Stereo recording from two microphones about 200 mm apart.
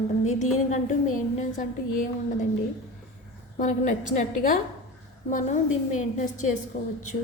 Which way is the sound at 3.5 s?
40° left (ahead or behind).